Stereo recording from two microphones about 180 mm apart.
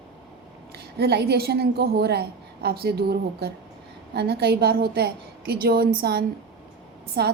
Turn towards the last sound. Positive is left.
turn(degrees=-65)  # may be behind; listen again after turning